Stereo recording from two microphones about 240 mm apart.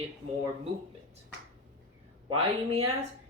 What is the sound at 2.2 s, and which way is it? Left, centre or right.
Speech, right.